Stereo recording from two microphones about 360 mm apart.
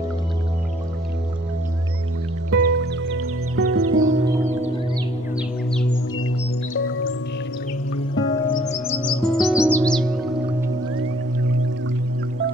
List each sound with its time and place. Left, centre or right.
2.5 s music: right
6.7 s music: left
8.1 s music: centre
8.8 s music: centre